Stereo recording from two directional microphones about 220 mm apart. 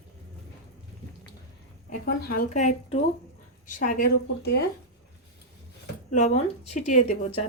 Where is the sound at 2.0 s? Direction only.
40° left (ahead or behind).